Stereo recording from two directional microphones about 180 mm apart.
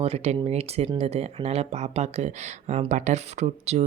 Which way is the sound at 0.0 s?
35° right (ahead or behind).